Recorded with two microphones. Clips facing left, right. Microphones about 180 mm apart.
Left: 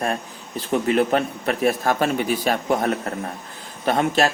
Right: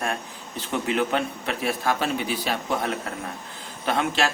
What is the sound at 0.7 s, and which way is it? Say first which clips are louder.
A man's voice: left 5 dB; 40° left (ahead or behind).